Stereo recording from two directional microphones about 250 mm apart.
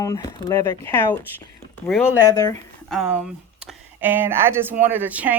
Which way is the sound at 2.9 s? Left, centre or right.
Centre.